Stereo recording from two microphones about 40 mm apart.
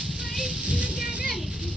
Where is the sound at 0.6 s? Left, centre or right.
Right.